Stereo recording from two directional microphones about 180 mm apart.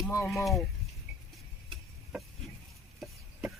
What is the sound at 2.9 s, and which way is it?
Stir, centre (ahead or behind).